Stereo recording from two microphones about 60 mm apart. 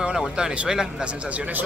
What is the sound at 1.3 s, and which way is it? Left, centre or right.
Speech, right.